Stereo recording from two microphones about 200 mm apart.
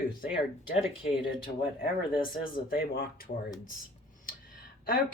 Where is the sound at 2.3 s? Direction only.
45° left (ahead or behind).